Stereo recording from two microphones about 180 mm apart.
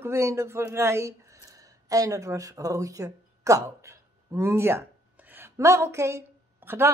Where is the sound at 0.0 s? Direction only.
15° right (ahead or behind).